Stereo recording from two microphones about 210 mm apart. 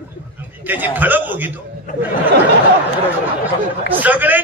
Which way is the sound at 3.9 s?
10° right (ahead or behind).